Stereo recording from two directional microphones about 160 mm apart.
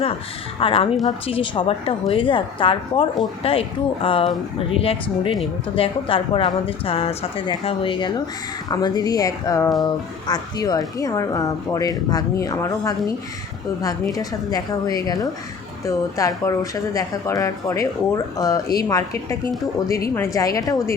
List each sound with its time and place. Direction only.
0.6 s a woman's voice: 35° left (ahead or behind)